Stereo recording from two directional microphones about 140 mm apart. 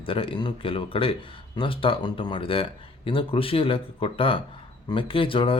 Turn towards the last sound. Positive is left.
turn(degrees=40)  # may be behind; listen again after turning